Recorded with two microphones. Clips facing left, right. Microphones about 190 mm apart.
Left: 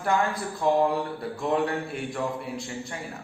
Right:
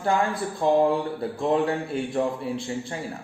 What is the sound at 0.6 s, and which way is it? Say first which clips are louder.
Speech: right 3 dB; 30° right (ahead or behind).